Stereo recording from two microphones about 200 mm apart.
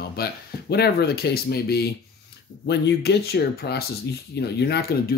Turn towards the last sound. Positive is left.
turn(degrees=50)  # may be behind; listen again after turning